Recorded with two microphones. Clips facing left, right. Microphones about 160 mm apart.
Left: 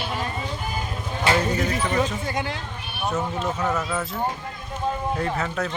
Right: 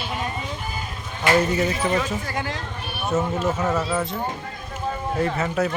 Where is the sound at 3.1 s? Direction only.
5° right (ahead or behind).